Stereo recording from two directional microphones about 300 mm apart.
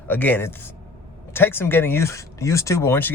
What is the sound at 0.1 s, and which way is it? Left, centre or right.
Speech, centre.